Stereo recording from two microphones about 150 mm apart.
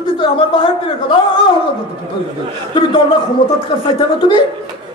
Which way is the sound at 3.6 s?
35° left (ahead or behind).